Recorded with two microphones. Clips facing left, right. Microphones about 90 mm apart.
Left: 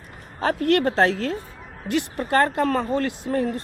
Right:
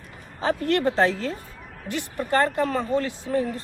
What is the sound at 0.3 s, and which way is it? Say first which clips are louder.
A woman's voice: left 3 dB; 65° left (ahead or behind).